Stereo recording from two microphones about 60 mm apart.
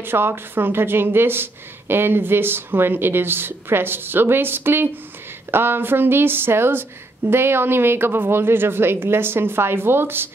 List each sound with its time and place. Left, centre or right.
0.0 s a woman's voice: right